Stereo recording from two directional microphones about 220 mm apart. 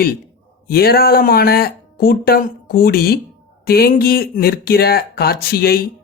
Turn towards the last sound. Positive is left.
turn(degrees=45)  # may be behind; listen again after turning